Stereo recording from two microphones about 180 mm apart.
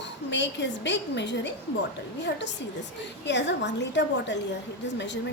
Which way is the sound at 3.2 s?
75° left (ahead or behind).